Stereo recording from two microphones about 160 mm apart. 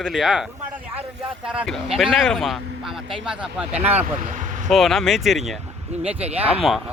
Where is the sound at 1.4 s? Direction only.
Centre (ahead or behind).